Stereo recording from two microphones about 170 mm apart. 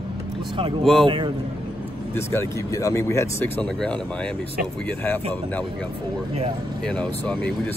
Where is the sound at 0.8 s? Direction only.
Centre (ahead or behind).